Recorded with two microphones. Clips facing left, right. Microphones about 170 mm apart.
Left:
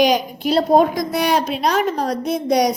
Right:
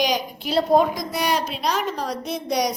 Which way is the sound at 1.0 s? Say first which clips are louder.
Left 5 dB; 55° left (ahead or behind).